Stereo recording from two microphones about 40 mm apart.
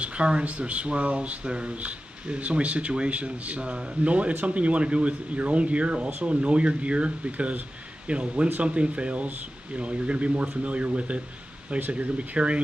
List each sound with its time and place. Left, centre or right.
0.0 s speech: right